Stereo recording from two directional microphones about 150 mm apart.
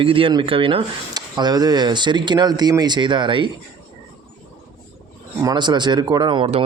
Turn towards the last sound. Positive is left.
turn(degrees=-35)  # may be behind; listen again after turning